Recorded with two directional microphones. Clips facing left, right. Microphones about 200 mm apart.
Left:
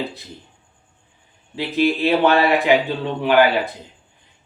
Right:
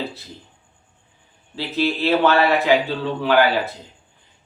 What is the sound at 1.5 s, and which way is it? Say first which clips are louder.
A man's voice: left 3 dB; 15° left (ahead or behind).